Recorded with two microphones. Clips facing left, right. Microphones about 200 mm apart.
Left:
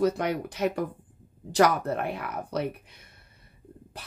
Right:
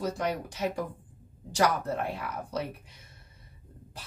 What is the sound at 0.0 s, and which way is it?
Speech, 60° left (ahead or behind).